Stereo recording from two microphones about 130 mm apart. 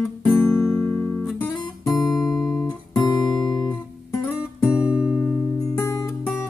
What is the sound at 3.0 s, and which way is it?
Guitar, 30° left (ahead or behind).